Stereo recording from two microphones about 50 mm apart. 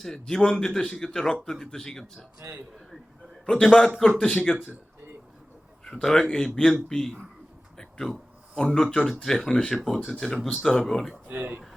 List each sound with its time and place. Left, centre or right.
0.0 s speech: centre
3.4 s a man's voice: centre
4.5 s a man's voice: left
5.9 s speech: centre
7.8 s a sound: centre
8.5 s speech: centre
11.3 s speech: right